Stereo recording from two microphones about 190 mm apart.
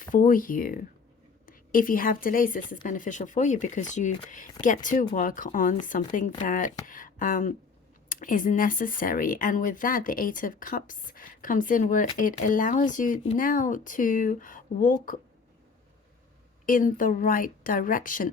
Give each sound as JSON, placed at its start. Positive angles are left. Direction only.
{"t": 0.0, "sound": "a woman's voice", "side_deg": 45}
{"t": 16.6, "sound": "speech", "side_deg": 45}